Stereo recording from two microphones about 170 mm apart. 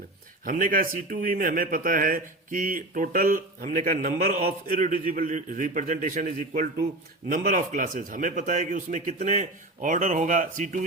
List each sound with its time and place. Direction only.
0.4 s speech: 55° right (ahead or behind)